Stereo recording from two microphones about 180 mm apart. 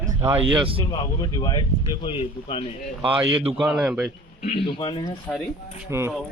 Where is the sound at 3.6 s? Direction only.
5° right (ahead or behind).